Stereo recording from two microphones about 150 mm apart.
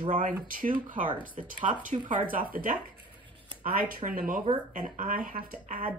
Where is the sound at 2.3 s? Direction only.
70° right (ahead or behind).